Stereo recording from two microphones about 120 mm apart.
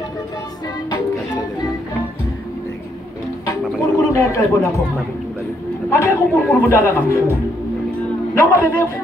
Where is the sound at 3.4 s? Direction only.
25° left (ahead or behind).